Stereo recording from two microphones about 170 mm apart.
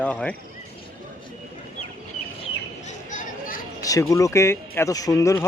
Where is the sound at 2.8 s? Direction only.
50° left (ahead or behind).